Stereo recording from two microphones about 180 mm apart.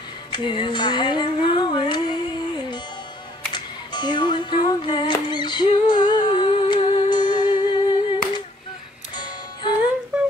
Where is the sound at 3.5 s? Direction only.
25° left (ahead or behind).